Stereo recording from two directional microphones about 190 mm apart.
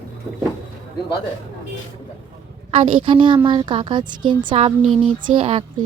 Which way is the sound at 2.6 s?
35° right (ahead or behind).